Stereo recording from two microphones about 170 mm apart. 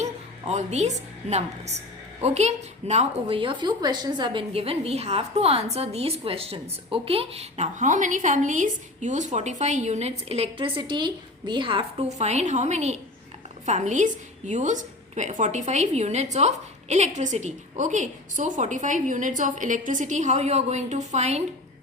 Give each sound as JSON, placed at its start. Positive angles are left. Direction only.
{"t": 0.0, "sound": "a woman's voice", "side_deg": -40}